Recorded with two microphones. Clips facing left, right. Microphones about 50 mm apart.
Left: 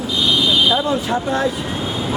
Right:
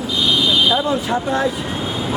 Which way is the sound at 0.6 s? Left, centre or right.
Centre.